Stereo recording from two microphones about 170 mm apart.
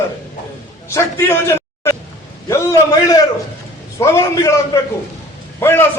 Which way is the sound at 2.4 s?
20° left (ahead or behind).